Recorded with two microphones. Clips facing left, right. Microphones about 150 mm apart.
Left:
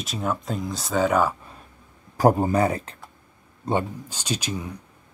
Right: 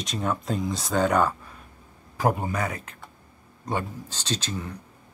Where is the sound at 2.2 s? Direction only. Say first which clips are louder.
Left 7 dB; 35° left (ahead or behind).